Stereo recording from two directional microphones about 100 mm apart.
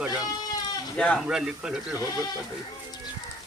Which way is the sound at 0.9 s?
10° left (ahead or behind).